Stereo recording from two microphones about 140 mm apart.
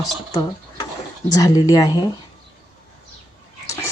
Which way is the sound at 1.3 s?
25° left (ahead or behind).